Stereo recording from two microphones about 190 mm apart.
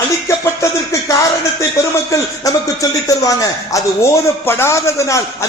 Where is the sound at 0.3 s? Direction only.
15° left (ahead or behind).